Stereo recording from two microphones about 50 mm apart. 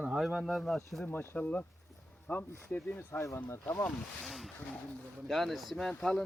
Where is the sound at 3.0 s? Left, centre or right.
Left.